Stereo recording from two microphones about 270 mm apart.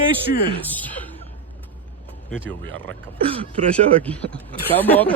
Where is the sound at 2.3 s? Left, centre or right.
Centre.